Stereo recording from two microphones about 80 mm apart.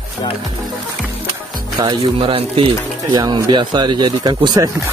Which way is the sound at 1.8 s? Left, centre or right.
Right.